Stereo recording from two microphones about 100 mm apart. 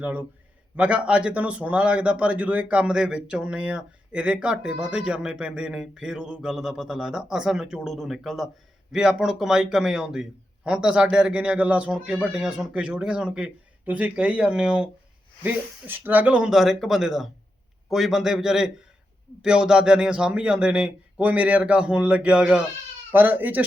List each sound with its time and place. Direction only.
0.0 s a man's voice: 15° right (ahead or behind)
23.1 s speech: 20° right (ahead or behind)